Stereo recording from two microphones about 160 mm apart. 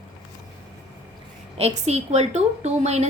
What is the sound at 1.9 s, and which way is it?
A woman's voice, 45° right (ahead or behind).